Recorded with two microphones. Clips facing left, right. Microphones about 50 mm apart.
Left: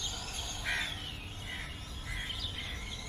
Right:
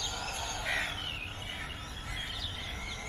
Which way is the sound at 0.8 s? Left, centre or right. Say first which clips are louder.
Right 3 dB; right.